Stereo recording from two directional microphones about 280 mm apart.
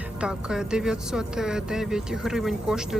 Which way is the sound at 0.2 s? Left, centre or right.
Centre.